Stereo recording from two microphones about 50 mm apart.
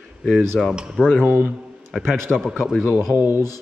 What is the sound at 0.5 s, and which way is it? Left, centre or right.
Speech, centre.